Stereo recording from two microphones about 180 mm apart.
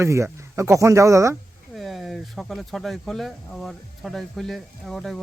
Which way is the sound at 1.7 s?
Centre (ahead or behind).